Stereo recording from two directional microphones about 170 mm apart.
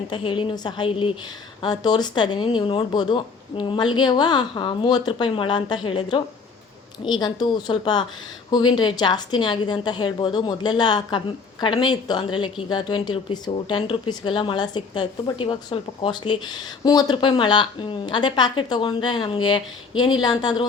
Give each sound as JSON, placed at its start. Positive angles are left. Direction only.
{"t": 0.1, "sound": "a woman's voice", "side_deg": 30}